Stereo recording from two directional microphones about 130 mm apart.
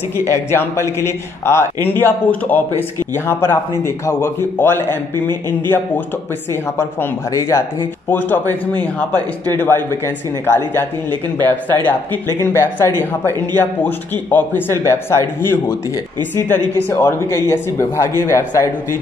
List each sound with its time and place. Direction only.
0.2 s a man's voice: 20° left (ahead or behind)